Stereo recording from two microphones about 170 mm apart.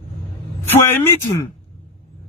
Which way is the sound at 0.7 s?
15° left (ahead or behind).